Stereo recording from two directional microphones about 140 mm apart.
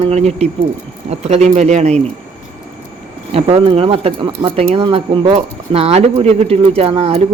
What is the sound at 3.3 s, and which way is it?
Speech, 45° right (ahead or behind).